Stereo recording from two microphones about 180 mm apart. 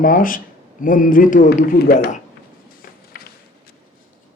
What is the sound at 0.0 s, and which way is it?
A man's voice, 50° left (ahead or behind).